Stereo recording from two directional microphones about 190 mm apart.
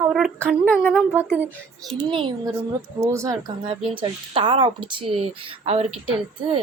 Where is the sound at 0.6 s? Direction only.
Centre (ahead or behind).